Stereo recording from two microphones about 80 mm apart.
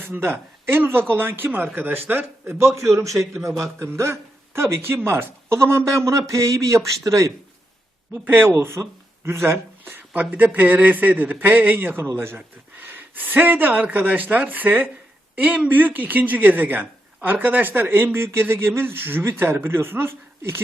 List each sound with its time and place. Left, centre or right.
0.0 s speech: right
8.2 s speech: right